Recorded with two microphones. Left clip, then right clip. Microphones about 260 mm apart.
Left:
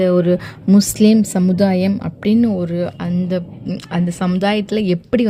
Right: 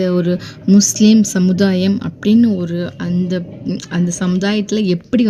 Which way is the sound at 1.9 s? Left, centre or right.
Left.